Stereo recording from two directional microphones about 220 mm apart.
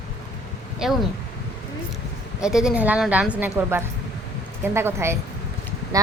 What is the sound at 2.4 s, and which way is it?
A woman's voice, 5° right (ahead or behind).